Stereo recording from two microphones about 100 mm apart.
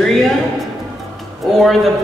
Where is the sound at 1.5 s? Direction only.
Centre (ahead or behind).